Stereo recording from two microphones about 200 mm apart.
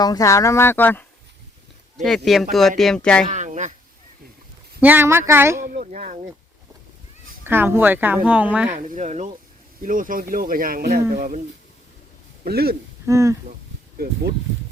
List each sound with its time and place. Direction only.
0.0 s speech: 20° left (ahead or behind)
3.2 s a sound: 35° right (ahead or behind)
4.8 s speech: 10° right (ahead or behind)
5.6 s speech: 45° right (ahead or behind)
7.4 s speech: 10° right (ahead or behind)
8.7 s speech: 35° right (ahead or behind)
12.5 s speech: 50° right (ahead or behind)
13.1 s speech: 15° right (ahead or behind)